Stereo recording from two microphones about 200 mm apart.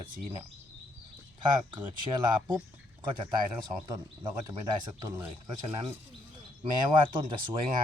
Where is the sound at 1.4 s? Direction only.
20° right (ahead or behind).